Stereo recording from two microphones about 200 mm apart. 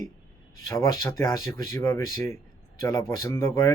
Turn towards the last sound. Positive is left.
turn(degrees=15)  # may be behind; listen again after turning